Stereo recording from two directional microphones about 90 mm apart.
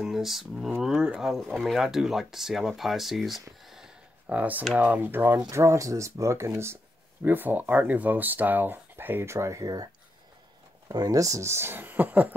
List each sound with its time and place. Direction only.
0.0 s speech: 5° right (ahead or behind)
4.3 s speech: 15° right (ahead or behind); by 9.8 s 40° right (ahead or behind)
10.9 s speech: 45° right (ahead or behind); by 12.4 s 20° right (ahead or behind)